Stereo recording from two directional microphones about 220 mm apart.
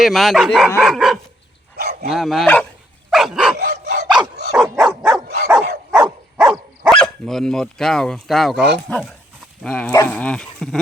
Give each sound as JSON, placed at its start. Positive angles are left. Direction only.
{"t": 0.0, "sound": "dog", "side_deg": 0}
{"t": 1.7, "sound": "bow-wow", "side_deg": -45}
{"t": 2.0, "sound": "dog", "side_deg": 0}
{"t": 6.3, "sound": "speech", "side_deg": 0}
{"t": 8.9, "sound": "dog", "side_deg": 0}